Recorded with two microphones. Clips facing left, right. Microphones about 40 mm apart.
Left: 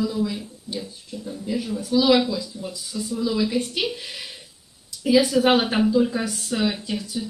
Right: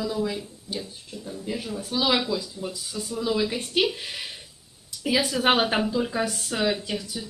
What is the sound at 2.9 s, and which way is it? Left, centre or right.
Speech, right.